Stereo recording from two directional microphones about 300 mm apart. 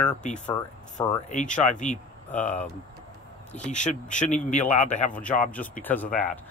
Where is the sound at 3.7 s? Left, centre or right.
Left.